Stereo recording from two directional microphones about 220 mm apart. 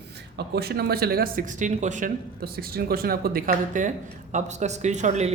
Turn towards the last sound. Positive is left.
turn(degrees=-30)  # may be behind; listen again after turning